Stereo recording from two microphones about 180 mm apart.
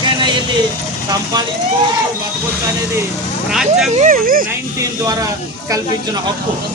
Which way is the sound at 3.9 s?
45° right (ahead or behind).